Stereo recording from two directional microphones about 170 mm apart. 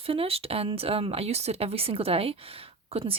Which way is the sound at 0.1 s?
35° right (ahead or behind).